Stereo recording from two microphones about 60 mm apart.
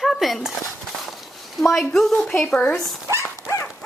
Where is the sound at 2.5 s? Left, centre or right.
Left.